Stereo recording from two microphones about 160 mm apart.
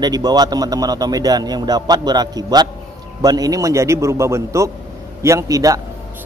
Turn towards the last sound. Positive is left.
turn(degrees=-20)  # may be behind; listen again after turning